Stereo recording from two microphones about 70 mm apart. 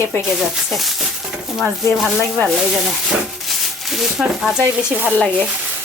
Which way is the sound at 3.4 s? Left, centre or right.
Centre.